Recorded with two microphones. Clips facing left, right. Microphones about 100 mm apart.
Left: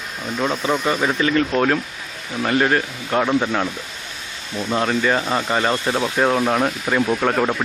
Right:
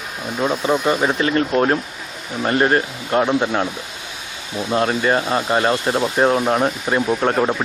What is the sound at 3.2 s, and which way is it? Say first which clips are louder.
Speech: even; 10° right (ahead or behind).